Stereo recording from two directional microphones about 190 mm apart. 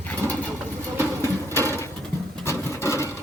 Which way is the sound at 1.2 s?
10° left (ahead or behind).